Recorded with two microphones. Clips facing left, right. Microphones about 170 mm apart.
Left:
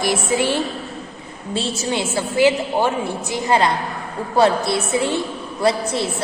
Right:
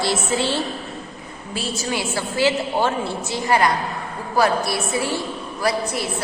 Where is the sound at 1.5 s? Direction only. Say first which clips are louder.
Left 3 dB; 25° left (ahead or behind).